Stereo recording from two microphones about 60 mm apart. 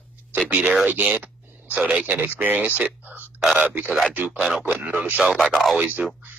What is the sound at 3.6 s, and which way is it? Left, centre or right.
Speech, right.